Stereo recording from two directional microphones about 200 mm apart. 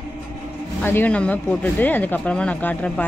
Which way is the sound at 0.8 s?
10° left (ahead or behind).